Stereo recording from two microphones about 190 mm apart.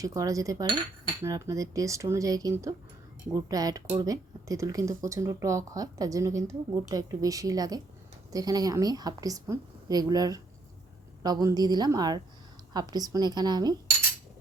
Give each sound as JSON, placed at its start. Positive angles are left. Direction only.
{"t": 0.0, "sound": "a woman's voice", "side_deg": -15}